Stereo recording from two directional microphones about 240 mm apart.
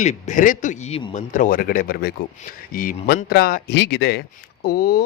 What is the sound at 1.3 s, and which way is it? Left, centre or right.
A man's voice, left.